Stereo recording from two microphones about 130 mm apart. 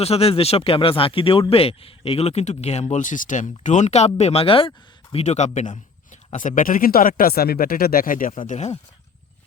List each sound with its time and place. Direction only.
0.0 s speech: 50° left (ahead or behind)
5.1 s a man's voice: 60° left (ahead or behind); by 8.3 s 90° left
8.4 s speech: 65° left (ahead or behind)